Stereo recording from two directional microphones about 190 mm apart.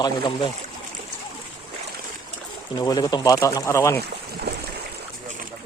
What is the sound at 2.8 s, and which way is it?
Speech, 20° left (ahead or behind).